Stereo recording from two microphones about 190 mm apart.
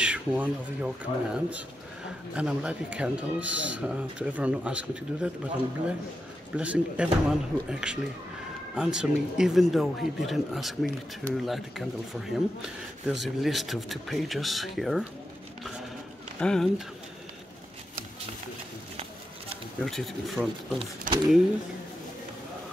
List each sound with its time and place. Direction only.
0.0 s speech: 5° right (ahead or behind)
6.5 s speech: 5° right (ahead or behind)
16.3 s speech: 5° left (ahead or behind)
19.8 s speech: centre (ahead or behind)
21.1 s speech: 45° right (ahead or behind)